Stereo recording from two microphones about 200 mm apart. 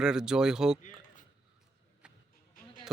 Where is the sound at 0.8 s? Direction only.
40° left (ahead or behind).